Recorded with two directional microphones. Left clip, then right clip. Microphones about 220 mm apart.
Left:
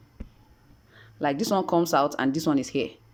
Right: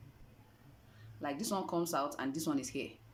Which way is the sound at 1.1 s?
40° left (ahead or behind).